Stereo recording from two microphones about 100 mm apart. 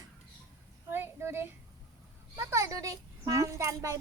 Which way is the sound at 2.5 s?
30° right (ahead or behind).